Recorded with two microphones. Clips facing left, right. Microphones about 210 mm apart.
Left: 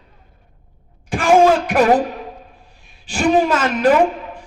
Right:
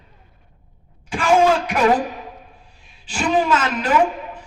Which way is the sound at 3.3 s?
50° left (ahead or behind).